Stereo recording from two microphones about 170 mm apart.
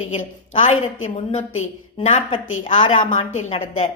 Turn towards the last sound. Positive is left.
turn(degrees=40)  # may be behind; listen again after turning